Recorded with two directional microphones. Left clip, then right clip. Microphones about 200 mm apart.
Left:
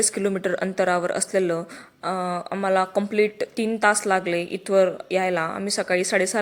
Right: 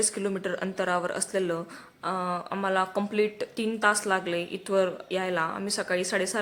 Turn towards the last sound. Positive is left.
turn(degrees=20)  # may be behind; listen again after turning